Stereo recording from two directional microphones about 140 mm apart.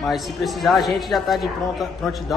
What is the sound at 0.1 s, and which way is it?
A man's voice, centre (ahead or behind).